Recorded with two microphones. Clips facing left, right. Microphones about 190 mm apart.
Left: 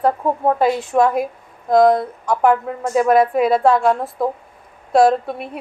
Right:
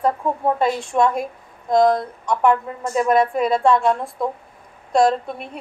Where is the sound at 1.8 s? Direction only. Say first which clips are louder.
Left 3 dB; 55° left (ahead or behind).